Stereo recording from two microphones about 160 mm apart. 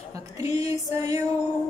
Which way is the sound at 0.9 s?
20° right (ahead or behind).